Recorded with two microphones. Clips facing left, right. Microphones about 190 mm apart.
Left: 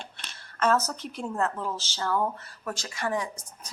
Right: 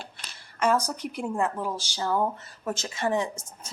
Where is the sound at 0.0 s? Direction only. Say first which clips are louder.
Right 1 dB; 10° right (ahead or behind).